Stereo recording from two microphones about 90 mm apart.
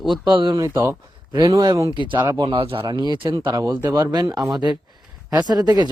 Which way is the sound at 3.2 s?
70° right (ahead or behind).